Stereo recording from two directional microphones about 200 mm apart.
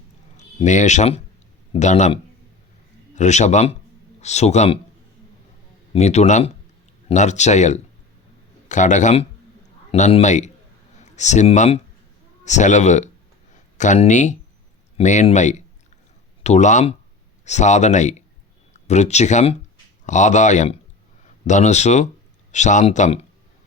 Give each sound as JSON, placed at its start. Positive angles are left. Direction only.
{"t": 0.3, "sound": "speech", "side_deg": 35}
{"t": 3.2, "sound": "speech", "side_deg": 35}
{"t": 5.9, "sound": "speech", "side_deg": 35}